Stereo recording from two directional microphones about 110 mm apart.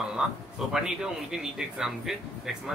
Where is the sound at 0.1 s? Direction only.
5° right (ahead or behind).